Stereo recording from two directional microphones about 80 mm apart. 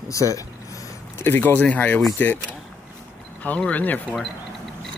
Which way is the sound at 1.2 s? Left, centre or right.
Left.